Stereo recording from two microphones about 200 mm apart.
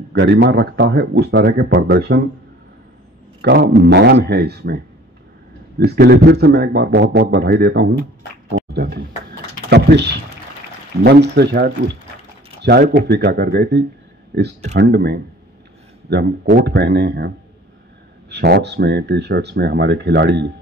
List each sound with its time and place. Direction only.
0.1 s speech: 60° right (ahead or behind)
3.3 s speech: 55° right (ahead or behind)
5.8 s speech: 55° right (ahead or behind)
18.3 s speech: 55° right (ahead or behind)